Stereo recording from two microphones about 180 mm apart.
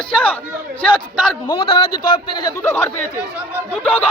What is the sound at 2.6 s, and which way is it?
Speech, 15° left (ahead or behind).